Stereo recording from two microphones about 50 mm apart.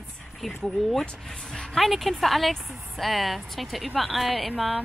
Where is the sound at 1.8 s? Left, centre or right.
Centre.